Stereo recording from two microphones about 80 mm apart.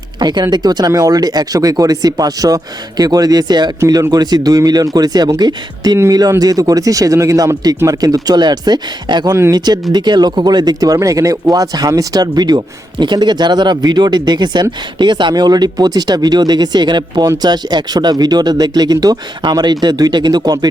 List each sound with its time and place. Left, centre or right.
0.2 s speech: right